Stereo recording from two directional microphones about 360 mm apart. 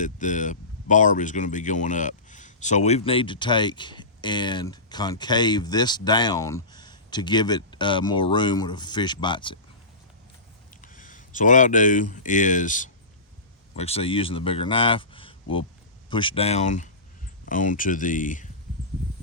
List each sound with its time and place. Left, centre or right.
0.0 s speech: left
10.8 s speech: left